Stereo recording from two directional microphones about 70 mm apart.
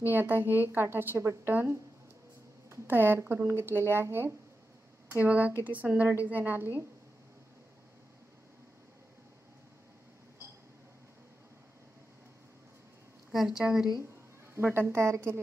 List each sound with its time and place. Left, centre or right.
0.1 s speech: right
2.7 s speech: right
5.2 s speech: right
13.3 s speech: centre
14.5 s speech: right